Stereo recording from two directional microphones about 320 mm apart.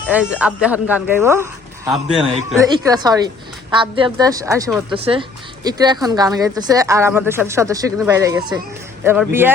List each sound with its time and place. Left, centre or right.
0.1 s speech: centre